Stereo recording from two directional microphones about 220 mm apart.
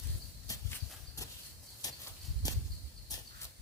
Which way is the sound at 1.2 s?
15° left (ahead or behind).